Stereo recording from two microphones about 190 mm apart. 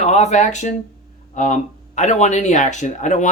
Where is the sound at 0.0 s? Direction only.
40° left (ahead or behind).